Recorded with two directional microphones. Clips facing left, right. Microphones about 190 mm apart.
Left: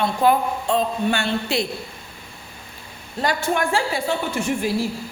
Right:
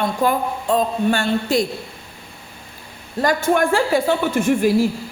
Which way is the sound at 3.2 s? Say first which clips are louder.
Right 5 dB; 50° right (ahead or behind).